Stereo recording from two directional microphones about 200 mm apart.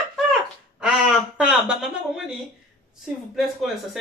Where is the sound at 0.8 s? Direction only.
5° right (ahead or behind).